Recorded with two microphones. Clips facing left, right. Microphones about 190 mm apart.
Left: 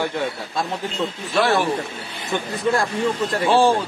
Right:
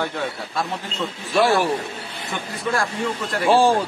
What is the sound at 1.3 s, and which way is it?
Speech, centre (ahead or behind).